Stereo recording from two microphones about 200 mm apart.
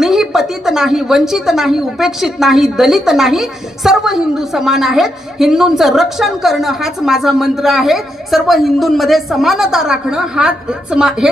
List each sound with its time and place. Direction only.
0.0 s a woman's voice: centre (ahead or behind)